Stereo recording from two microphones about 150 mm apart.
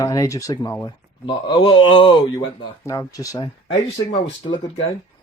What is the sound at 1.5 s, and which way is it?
Speech, 30° left (ahead or behind).